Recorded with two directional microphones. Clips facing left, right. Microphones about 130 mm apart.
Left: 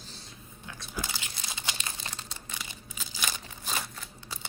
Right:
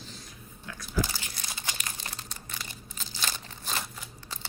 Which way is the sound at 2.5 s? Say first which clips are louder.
Even; 5° left (ahead or behind).